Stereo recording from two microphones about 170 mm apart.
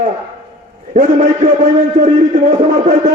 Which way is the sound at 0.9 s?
50° right (ahead or behind).